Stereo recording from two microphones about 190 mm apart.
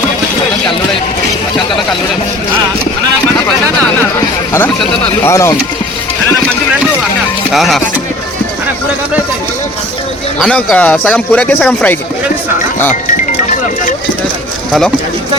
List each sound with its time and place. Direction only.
5.2 s speech: 15° left (ahead or behind)
7.5 s music: centre (ahead or behind)
10.4 s speech: 5° left (ahead or behind)
14.7 s speech: centre (ahead or behind)